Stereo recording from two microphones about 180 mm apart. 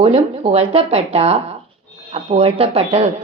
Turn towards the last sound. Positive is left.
turn(degrees=-35)  # may be behind; listen again after turning